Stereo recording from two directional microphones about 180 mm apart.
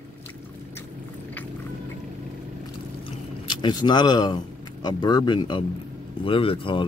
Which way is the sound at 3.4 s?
25° left (ahead or behind).